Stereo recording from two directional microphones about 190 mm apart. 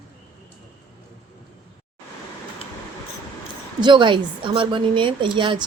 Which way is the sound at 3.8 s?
25° right (ahead or behind).